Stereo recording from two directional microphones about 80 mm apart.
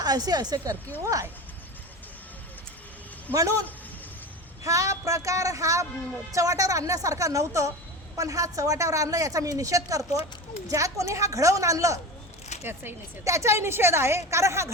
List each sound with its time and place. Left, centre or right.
0.0 s a woman's voice: right
1.0 s a woman's voice: right
3.3 s a man's voice: left
4.6 s a man's voice: right
12.6 s speech: right
13.2 s a woman's voice: right